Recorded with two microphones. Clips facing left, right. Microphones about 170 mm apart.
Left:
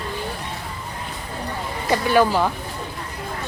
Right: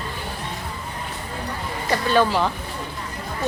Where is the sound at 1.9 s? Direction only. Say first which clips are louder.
Left 2 dB; 15° left (ahead or behind).